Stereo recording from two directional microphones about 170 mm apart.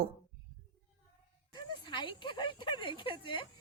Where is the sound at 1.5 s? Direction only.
25° left (ahead or behind).